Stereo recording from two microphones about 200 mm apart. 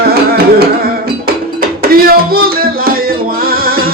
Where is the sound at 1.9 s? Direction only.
50° right (ahead or behind).